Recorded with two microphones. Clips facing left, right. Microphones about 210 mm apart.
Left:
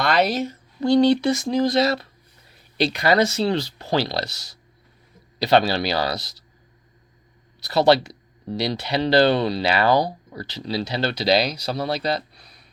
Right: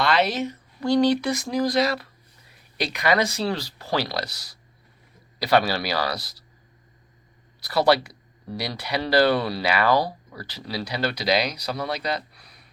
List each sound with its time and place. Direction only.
0.0 s a woman's voice: 45° left (ahead or behind)
0.8 s speech: 25° left (ahead or behind)
7.6 s speech: 25° left (ahead or behind)